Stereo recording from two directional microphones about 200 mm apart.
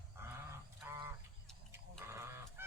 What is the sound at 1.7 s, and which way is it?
Goat, 10° right (ahead or behind).